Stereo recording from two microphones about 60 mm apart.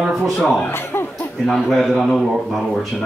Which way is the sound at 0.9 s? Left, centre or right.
Left.